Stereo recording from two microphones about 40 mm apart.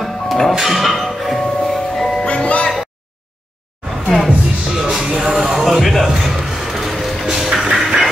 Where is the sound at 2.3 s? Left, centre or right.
Left.